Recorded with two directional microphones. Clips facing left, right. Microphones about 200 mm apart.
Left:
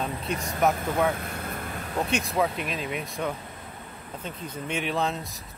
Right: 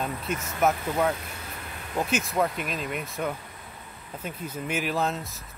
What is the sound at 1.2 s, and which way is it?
Vehicle, 55° left (ahead or behind).